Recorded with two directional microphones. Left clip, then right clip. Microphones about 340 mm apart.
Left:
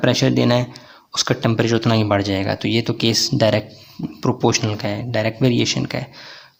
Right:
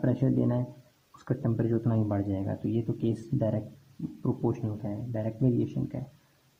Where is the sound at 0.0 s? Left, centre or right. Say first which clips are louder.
Left 12 dB; left.